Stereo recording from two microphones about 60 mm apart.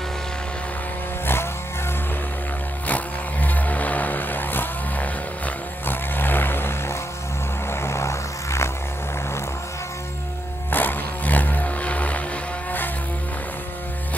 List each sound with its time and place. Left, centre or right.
1.2 s vehicle: left
2.9 s vehicle: left
7.7 s vehicle: left
10.7 s music: left